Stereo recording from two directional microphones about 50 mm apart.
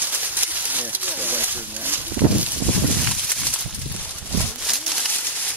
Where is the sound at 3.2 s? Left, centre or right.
Centre.